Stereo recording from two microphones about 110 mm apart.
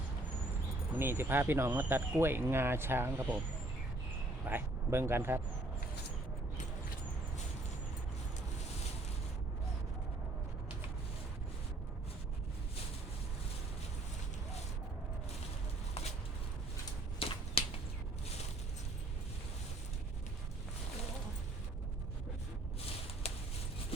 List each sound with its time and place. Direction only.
0.9 s speech: 20° right (ahead or behind)
4.4 s speech: 20° right (ahead or behind)
17.2 s finger snapping: 60° left (ahead or behind)
23.2 s a sound: 75° left (ahead or behind)